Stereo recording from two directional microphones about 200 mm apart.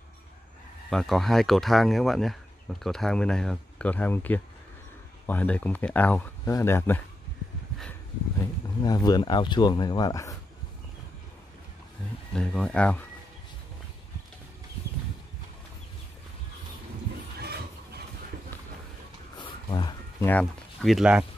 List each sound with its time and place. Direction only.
0.8 s speech: centre (ahead or behind)
8.8 s speech: 20° left (ahead or behind)
12.4 s speech: 5° left (ahead or behind)
17.4 s a sound: 50° right (ahead or behind)
19.3 s a sound: 25° left (ahead or behind)
20.2 s speech: 5° left (ahead or behind)